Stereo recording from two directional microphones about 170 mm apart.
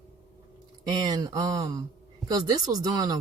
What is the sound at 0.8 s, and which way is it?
Speech, 25° right (ahead or behind).